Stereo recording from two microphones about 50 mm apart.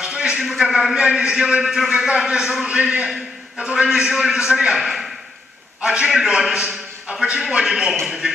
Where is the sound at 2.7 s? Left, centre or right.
Right.